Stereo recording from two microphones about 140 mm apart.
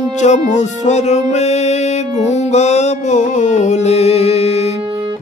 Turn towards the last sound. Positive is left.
turn(degrees=50)  # may be behind; listen again after turning